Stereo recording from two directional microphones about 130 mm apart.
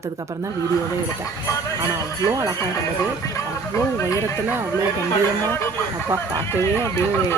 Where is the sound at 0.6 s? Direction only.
25° left (ahead or behind).